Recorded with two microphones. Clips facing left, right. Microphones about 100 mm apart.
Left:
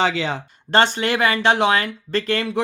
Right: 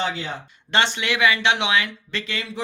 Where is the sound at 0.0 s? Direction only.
90° left.